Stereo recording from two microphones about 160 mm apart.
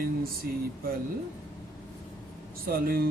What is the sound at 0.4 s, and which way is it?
Speech, 70° right (ahead or behind).